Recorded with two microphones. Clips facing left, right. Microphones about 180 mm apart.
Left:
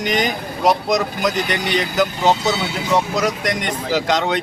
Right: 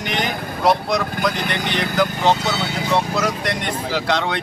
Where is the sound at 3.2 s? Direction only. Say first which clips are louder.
Left 2 dB; 15° left (ahead or behind).